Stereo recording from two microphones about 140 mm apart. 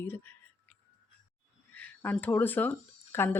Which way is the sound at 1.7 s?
15° left (ahead or behind).